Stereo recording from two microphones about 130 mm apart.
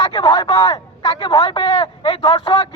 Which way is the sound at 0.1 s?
30° left (ahead or behind).